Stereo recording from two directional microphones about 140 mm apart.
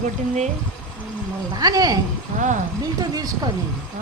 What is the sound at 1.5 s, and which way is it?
A woman's voice, 25° right (ahead or behind).